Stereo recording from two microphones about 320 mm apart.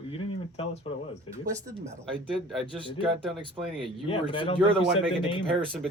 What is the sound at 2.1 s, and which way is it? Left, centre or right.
Speech, centre.